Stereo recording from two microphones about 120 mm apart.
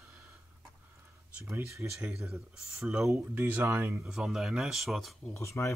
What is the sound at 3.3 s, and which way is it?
Speech, 15° right (ahead or behind).